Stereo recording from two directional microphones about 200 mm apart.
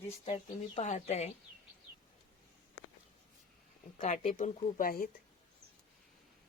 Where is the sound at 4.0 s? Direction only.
35° left (ahead or behind).